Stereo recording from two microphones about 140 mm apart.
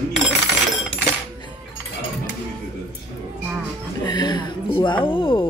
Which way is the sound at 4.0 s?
30° left (ahead or behind).